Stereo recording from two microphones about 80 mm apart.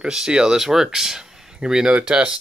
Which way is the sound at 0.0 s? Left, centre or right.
Centre.